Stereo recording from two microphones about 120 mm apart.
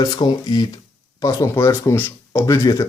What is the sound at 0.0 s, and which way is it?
Speech, 35° left (ahead or behind).